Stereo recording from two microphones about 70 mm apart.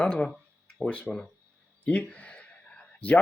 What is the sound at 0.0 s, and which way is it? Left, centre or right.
Speech, centre.